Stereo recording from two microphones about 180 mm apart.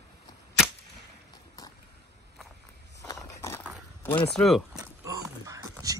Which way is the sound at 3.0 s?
15° left (ahead or behind).